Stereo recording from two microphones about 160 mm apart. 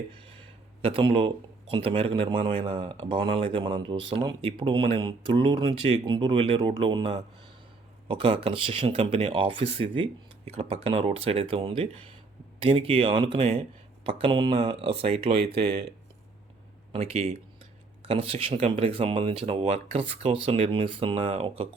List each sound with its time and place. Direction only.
0.8 s speech: 35° right (ahead or behind)
16.9 s speech: 40° right (ahead or behind)